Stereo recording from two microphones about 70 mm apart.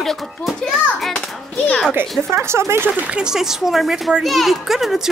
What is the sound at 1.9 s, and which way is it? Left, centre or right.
Speech, right.